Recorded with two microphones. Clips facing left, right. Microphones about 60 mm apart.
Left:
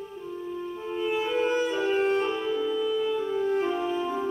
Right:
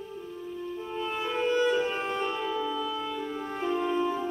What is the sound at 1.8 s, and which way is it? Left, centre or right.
Music, centre.